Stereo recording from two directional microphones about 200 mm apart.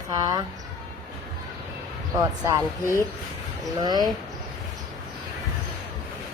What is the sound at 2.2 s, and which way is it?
Speech, 20° right (ahead or behind).